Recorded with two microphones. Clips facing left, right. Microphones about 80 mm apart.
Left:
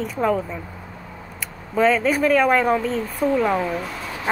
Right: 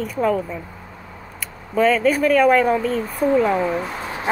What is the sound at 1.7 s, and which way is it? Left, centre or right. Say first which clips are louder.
Speech: right 1 dB; left.